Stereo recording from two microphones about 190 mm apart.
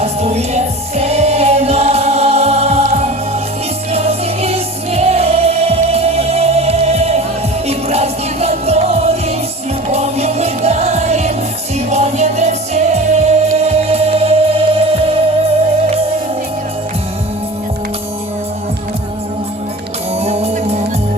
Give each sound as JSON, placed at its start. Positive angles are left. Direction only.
{"t": 0.0, "sound": "music", "side_deg": -35}
{"t": 20.1, "sound": "music", "side_deg": -35}